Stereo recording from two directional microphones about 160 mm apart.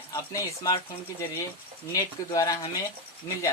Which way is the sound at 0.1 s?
20° left (ahead or behind).